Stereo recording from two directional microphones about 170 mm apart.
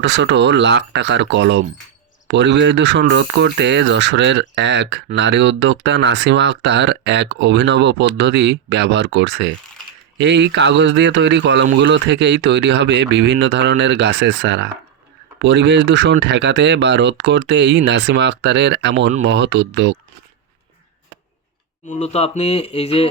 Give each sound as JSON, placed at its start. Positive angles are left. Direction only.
{"t": 0.0, "sound": "speech", "side_deg": -90}
{"t": 21.8, "sound": "speech", "side_deg": 40}